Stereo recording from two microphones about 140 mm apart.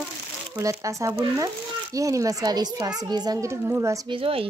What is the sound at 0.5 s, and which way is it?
Speech, 20° right (ahead or behind).